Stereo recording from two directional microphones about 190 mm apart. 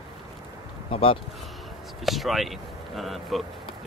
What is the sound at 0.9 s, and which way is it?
Speech, 30° left (ahead or behind).